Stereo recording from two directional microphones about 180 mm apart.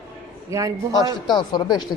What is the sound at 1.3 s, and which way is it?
Speech, 25° left (ahead or behind).